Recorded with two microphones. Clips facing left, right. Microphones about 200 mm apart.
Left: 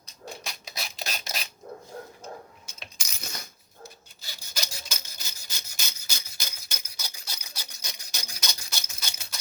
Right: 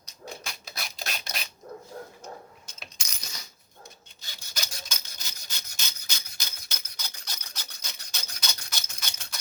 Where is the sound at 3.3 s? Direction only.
50° left (ahead or behind).